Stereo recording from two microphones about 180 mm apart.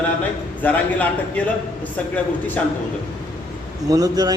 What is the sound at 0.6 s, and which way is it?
Speech, 10° left (ahead or behind).